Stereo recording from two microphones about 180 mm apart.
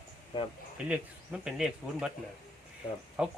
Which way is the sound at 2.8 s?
25° left (ahead or behind).